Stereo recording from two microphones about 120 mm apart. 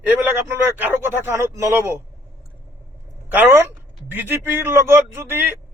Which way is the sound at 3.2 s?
15° right (ahead or behind).